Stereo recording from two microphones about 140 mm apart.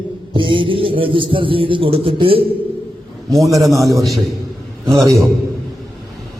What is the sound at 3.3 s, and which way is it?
Speech, centre (ahead or behind).